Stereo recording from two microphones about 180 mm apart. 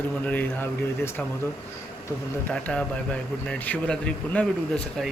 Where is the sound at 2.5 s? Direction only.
5° left (ahead or behind).